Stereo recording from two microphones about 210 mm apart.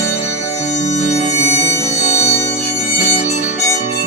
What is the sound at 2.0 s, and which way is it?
Music, 30° left (ahead or behind).